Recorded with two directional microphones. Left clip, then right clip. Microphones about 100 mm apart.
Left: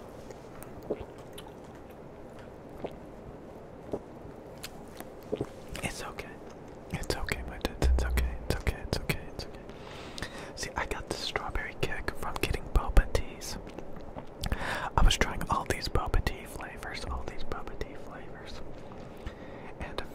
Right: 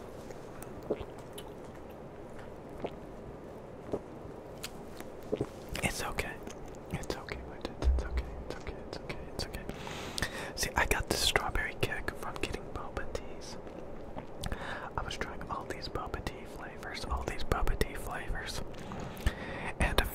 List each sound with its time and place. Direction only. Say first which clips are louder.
0.9 s squish: even; 10° left (ahead or behind)
5.3 s biting: even; 5° left (ahead or behind)
5.7 s whispering: right 2 dB; 15° right (ahead or behind)
7.1 s whispering: left 6 dB; 20° left (ahead or behind)
7.6 s music: left 6 dB; 35° left (ahead or behind)
10.1 s whispering: right 4 dB; 25° right (ahead or behind)
11.5 s whispering: right 1 dB; centre (ahead or behind)
12.2 s whispering: left 4 dB; 20° left (ahead or behind)
12.7 s whispering: left 7 dB; 45° left (ahead or behind)
14.4 s whispering: left 6 dB; 20° left (ahead or behind)
14.7 s whispering: left 10 dB; 40° left (ahead or behind)
15.0 s whispering: left 9 dB; 55° left (ahead or behind); by 16.3 s 30° left (ahead or behind)
17.2 s whispering: right 5 dB; 30° right (ahead or behind)
19.2 s whispering: right 9 dB; 35° right (ahead or behind)